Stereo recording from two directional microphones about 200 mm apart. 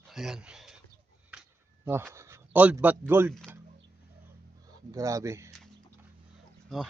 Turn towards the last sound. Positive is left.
turn(degrees=0)  # may be behind; listen again after turning